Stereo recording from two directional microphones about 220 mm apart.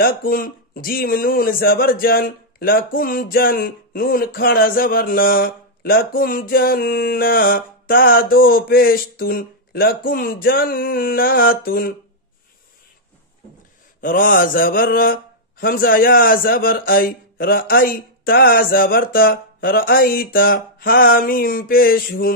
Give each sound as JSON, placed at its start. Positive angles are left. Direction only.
{"t": 0.0, "sound": "speech", "side_deg": 40}
{"t": 14.0, "sound": "speech", "side_deg": 40}